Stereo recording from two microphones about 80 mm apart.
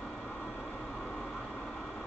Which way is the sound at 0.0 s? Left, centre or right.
Centre.